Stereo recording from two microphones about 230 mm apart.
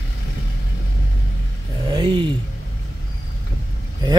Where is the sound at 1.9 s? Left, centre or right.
Right.